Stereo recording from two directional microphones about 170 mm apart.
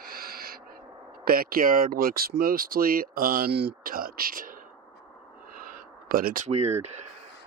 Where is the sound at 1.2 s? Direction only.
60° right (ahead or behind).